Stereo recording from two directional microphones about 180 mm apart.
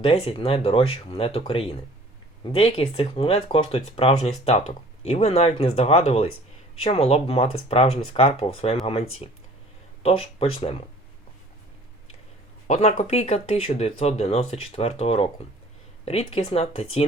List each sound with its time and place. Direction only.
0.0 s speech: 35° left (ahead or behind)
12.6 s speech: 40° left (ahead or behind)